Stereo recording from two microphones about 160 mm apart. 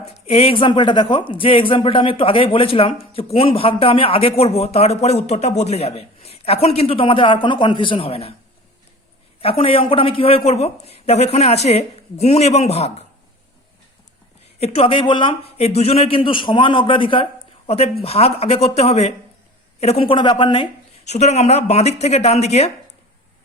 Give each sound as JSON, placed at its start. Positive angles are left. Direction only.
{"t": 0.0, "sound": "speech", "side_deg": 40}
{"t": 9.4, "sound": "speech", "side_deg": 35}
{"t": 14.6, "sound": "speech", "side_deg": 40}
{"t": 21.0, "sound": "speech", "side_deg": 45}